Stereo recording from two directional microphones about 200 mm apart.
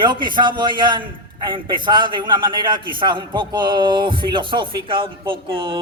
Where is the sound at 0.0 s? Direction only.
25° right (ahead or behind).